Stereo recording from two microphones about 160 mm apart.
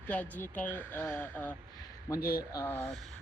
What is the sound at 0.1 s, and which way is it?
Speech, 10° left (ahead or behind).